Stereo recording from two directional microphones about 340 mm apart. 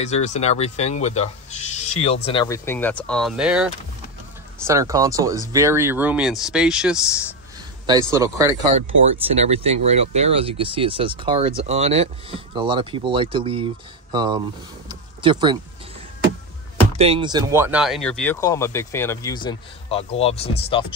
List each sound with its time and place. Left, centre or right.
0.0 s speech: centre
14.9 s a sound: centre
17.0 s speech: centre